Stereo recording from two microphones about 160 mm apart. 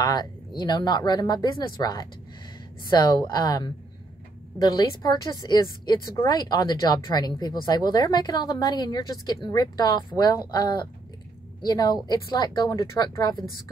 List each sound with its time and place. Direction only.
0.0 s a woman's voice: 25° left (ahead or behind)